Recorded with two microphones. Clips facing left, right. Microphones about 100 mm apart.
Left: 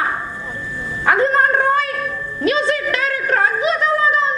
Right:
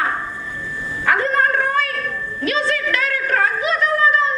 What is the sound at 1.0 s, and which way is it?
Dog, 20° left (ahead or behind).